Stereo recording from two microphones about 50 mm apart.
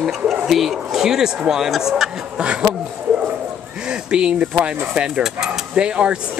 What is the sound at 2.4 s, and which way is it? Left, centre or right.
Speech, right.